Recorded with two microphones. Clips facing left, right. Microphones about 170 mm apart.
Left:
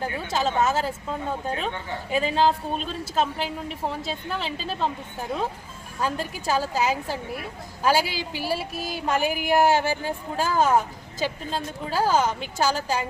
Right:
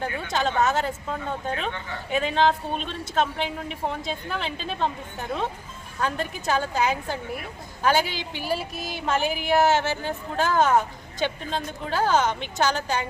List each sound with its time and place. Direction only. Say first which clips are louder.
0.3 s speech: even; 5° left (ahead or behind)
6.0 s speech: even; 5° left (ahead or behind)
8.8 s music: left 2 dB; 40° left (ahead or behind)
9.0 s a woman's voice: even; 10° left (ahead or behind)